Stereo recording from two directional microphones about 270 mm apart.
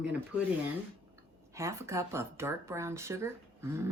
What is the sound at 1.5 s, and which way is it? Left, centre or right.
Speech, centre.